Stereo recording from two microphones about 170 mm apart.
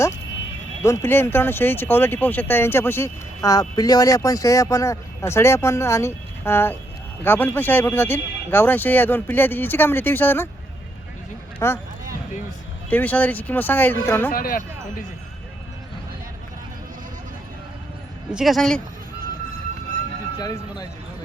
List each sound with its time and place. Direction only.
0.8 s speech: 15° left (ahead or behind)
11.6 s speech: 15° left (ahead or behind)
12.9 s speech: 10° left (ahead or behind)
14.3 s speech: 55° left (ahead or behind)
18.3 s speech: 5° right (ahead or behind)
20.4 s speech: 20° left (ahead or behind)